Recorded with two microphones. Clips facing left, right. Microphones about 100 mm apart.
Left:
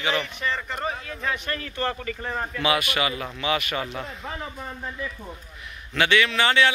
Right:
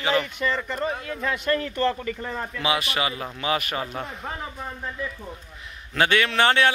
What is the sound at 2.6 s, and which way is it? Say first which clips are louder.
Speech: left 1 dB; 30° right (ahead or behind).